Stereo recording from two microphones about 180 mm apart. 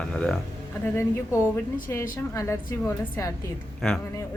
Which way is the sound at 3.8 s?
Centre (ahead or behind).